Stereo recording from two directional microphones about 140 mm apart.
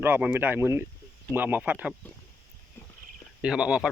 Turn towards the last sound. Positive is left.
turn(degrees=-5)  # may be behind; listen again after turning